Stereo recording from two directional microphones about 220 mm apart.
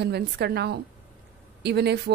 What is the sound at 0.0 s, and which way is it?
Speech, 50° right (ahead or behind).